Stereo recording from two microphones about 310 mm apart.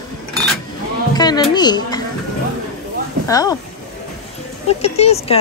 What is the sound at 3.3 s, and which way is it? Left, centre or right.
Speech, centre.